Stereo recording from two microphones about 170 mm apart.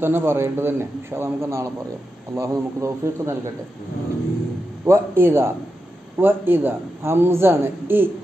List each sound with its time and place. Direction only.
0.0 s speech: 15° right (ahead or behind)
4.8 s speech: 15° right (ahead or behind)